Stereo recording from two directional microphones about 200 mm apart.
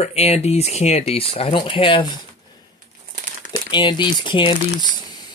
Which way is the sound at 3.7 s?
25° left (ahead or behind).